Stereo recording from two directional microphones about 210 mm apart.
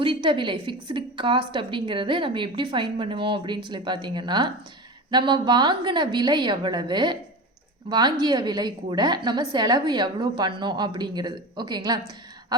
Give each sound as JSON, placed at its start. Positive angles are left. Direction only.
{"t": 0.0, "sound": "a woman's voice", "side_deg": -25}